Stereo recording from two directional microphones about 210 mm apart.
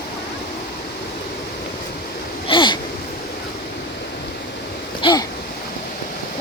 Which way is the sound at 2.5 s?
20° left (ahead or behind).